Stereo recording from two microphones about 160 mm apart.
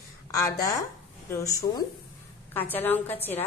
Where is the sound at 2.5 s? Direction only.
10° left (ahead or behind).